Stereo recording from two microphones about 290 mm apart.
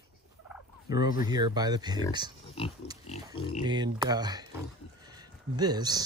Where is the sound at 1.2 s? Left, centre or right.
Centre.